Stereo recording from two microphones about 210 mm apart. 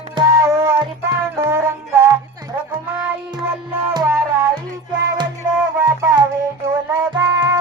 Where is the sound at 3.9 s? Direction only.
10° right (ahead or behind).